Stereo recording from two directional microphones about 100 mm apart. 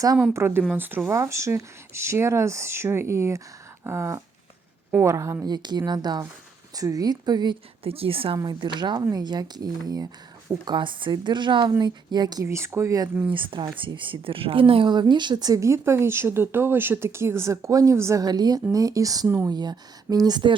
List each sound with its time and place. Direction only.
0.3 s speech: 25° right (ahead or behind)
1.1 s speech: 30° right (ahead or behind)
5.5 s speech: 45° right (ahead or behind)
7.9 s a woman's voice: 70° right (ahead or behind)
8.4 s speech: 50° right (ahead or behind)
10.7 s speech: 55° right (ahead or behind)
12.5 s speech: 25° right (ahead or behind)
13.3 s speech: 55° right (ahead or behind)